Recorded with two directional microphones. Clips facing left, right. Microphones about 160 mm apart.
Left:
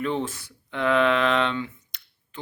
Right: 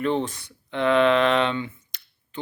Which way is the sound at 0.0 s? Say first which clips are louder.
Right 3 dB; 5° left (ahead or behind).